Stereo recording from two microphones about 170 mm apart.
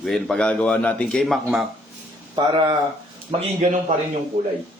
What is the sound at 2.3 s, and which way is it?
Speech, 25° right (ahead or behind).